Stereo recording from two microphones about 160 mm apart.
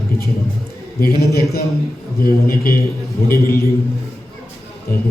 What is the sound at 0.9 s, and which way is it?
A man's voice, 70° left (ahead or behind).